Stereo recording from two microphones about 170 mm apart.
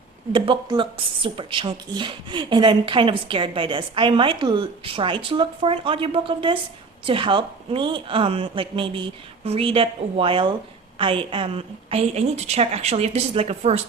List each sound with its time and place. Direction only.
0.3 s a woman's voice: 30° right (ahead or behind)